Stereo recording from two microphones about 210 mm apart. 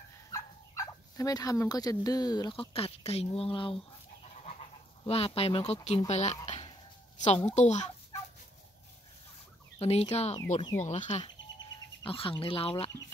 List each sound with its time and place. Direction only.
0.3 s speech: 15° left (ahead or behind); by 6.3 s 30° left (ahead or behind)
6.4 s a sound: 30° left (ahead or behind)
7.2 s a child's voice: 35° left (ahead or behind)
9.8 s speech: 30° left (ahead or behind)